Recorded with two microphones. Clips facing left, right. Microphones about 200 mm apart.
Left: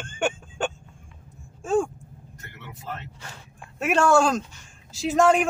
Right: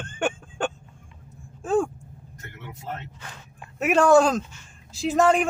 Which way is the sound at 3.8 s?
Centre (ahead or behind).